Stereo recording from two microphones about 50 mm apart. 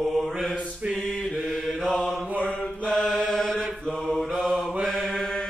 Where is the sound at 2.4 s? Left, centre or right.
Centre.